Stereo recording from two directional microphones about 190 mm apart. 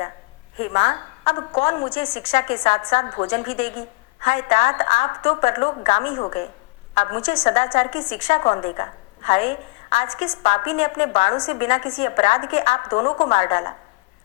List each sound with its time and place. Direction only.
0.6 s a woman's voice: 35° left (ahead or behind)